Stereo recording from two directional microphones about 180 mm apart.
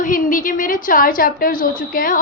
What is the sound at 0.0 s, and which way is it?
A woman's voice, 45° left (ahead or behind).